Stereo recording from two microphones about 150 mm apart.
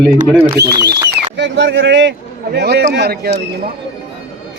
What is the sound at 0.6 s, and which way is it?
Speech, 90° right.